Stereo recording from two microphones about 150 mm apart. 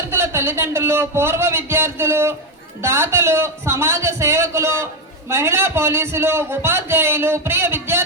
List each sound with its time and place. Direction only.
0.1 s a man's voice: 15° right (ahead or behind)